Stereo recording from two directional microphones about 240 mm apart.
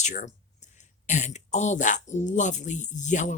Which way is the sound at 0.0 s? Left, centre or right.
Left.